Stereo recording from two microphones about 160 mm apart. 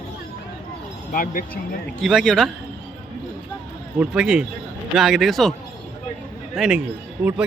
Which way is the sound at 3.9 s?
5° right (ahead or behind).